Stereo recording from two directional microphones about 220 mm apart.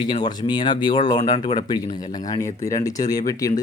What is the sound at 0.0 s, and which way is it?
Speech, 20° left (ahead or behind).